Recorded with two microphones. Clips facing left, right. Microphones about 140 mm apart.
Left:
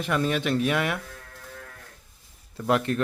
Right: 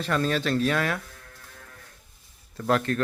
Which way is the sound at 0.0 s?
15° left (ahead or behind).